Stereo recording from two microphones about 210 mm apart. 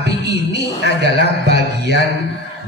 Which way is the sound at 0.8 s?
55° right (ahead or behind).